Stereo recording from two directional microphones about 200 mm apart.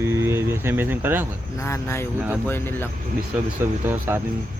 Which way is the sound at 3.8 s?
10° right (ahead or behind).